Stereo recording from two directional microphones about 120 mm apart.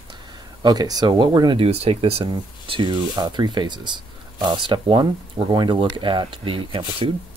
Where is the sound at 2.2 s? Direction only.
40° right (ahead or behind).